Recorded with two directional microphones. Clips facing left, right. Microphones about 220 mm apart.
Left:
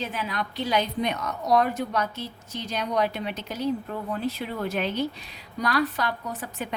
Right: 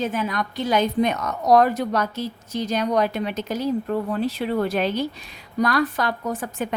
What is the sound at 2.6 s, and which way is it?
Speech, 45° right (ahead or behind).